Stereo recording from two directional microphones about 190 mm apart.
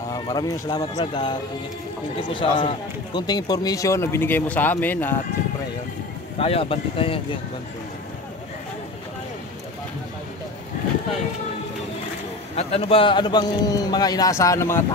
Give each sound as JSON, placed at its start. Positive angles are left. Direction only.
{"t": 0.1, "sound": "speech", "side_deg": 20}
{"t": 2.3, "sound": "a man's voice", "side_deg": 25}
{"t": 6.4, "sound": "speech", "side_deg": 30}
{"t": 12.5, "sound": "speech", "side_deg": 30}